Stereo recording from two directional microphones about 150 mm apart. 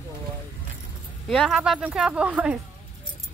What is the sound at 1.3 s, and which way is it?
Speech, centre (ahead or behind).